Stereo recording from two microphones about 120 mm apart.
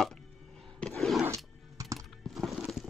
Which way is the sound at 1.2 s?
25° right (ahead or behind).